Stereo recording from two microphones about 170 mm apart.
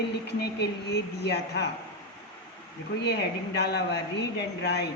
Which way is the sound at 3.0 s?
80° left.